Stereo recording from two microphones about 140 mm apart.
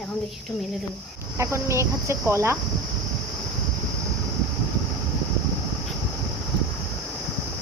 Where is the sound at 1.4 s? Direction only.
20° right (ahead or behind).